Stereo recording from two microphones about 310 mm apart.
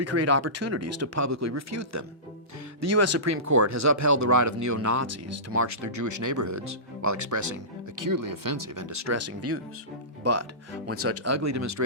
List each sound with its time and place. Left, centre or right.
0.0 s speech: right
7.9 s speech: right